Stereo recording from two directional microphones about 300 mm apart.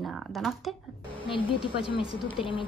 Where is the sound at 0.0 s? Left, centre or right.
Centre.